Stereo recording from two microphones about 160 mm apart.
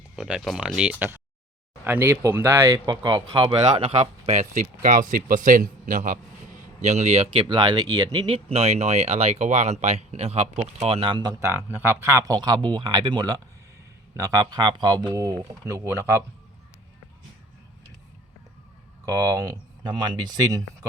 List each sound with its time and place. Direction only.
0.2 s speech: 5° right (ahead or behind); by 11.3 s 30° right (ahead or behind)
11.3 s speech: 15° right (ahead or behind)
19.0 s speech: 20° right (ahead or behind)